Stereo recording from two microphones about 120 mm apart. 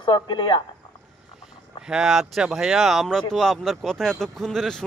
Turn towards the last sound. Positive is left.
turn(degrees=5)  # may be behind; listen again after turning